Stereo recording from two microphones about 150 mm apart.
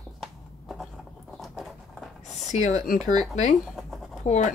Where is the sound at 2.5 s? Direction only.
50° left (ahead or behind).